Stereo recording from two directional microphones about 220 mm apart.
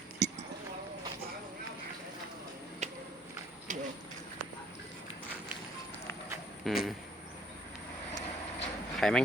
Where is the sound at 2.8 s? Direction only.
30° right (ahead or behind).